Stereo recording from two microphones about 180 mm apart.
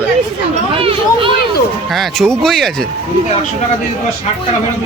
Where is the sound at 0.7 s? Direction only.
30° right (ahead or behind).